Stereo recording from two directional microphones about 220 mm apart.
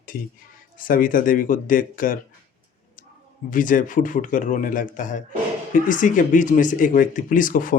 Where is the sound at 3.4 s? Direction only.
35° left (ahead or behind).